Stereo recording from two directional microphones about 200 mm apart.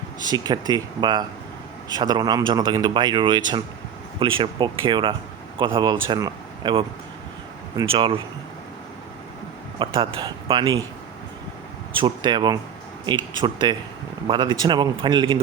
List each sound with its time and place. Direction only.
0.2 s speech: 20° right (ahead or behind)
7.9 s speech: 25° right (ahead or behind)
9.7 s speech: 25° right (ahead or behind)
11.9 s speech: 25° right (ahead or behind)